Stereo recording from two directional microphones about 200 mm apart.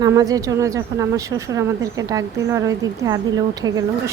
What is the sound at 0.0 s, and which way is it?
A woman's voice, 15° right (ahead or behind).